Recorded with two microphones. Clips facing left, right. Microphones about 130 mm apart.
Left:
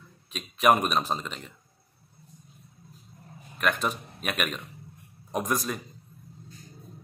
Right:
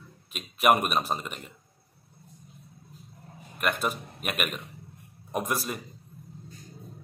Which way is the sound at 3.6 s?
5° right (ahead or behind).